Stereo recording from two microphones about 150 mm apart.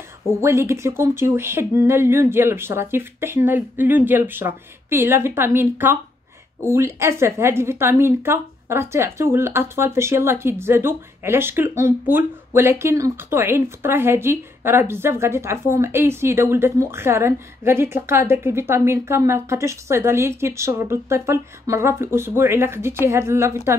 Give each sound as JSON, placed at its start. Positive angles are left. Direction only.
{"t": 0.4, "sound": "a woman's voice", "side_deg": -20}